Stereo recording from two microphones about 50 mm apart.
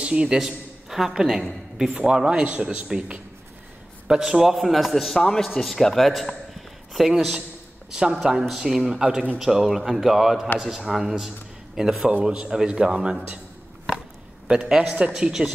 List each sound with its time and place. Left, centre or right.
0.0 s a woman's voice: centre
2.5 s a woman's voice: right
4.1 s a man's voice: centre
12.1 s speech: right
14.5 s a woman's voice: centre
15.1 s speech: centre